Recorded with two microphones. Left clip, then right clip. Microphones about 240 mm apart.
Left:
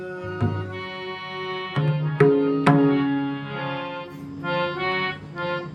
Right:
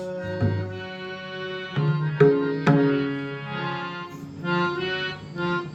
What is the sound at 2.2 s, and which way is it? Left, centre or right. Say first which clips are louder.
Music: even; left.